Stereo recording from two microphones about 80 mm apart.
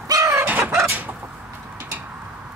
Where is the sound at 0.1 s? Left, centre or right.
Right.